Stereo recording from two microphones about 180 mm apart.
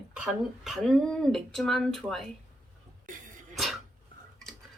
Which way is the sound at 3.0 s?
50° right (ahead or behind).